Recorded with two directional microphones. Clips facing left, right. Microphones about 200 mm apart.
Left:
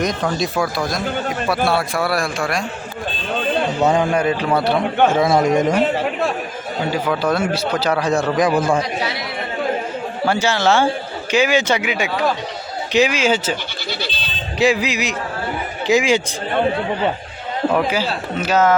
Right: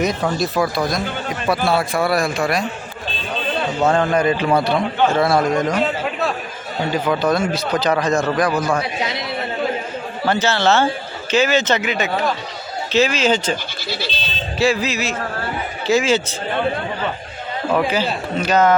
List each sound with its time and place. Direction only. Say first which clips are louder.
0.0 s speech: right 1 dB; 5° right (ahead or behind)
3.8 s a man's voice: right 1 dB; 10° left (ahead or behind)
6.9 s speech: right 2 dB; 10° left (ahead or behind)
8.4 s a man's voice: left 2 dB; 25° left (ahead or behind)
10.2 s speech: even; 10° left (ahead or behind)
14.6 s speech: left 1 dB; 15° left (ahead or behind)
17.7 s speech: even; 10° left (ahead or behind)